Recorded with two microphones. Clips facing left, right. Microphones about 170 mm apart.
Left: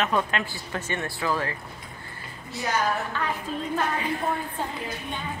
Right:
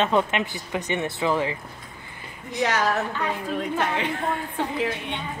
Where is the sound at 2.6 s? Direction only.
85° right.